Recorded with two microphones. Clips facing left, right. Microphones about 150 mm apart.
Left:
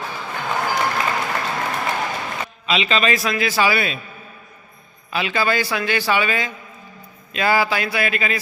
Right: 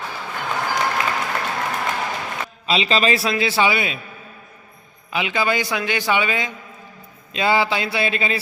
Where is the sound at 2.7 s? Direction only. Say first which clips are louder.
Right 1 dB; 35° right (ahead or behind).